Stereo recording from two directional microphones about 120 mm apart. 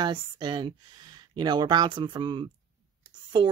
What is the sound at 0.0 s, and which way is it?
Speech, 40° right (ahead or behind).